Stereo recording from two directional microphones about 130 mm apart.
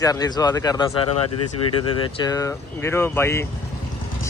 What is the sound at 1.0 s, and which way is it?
Speech, 45° left (ahead or behind).